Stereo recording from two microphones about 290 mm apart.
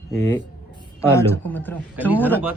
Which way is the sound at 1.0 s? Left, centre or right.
Centre.